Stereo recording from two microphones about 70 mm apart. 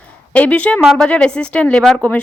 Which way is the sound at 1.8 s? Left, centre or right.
Centre.